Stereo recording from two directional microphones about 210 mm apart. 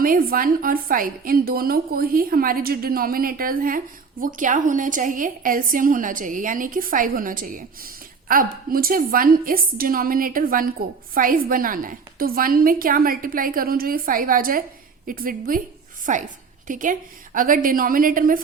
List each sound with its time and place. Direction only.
0.0 s a woman's voice: 40° right (ahead or behind)